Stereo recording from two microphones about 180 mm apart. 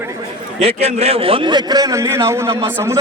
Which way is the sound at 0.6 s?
35° right (ahead or behind).